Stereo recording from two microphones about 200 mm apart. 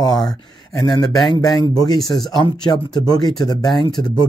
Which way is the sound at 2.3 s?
20° left (ahead or behind).